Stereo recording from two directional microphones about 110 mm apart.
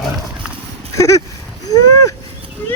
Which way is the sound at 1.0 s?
30° left (ahead or behind).